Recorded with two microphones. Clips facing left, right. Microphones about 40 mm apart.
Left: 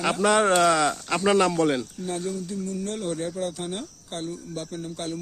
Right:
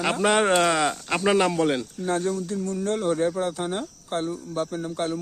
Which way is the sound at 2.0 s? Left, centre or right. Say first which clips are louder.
Right 4 dB; right.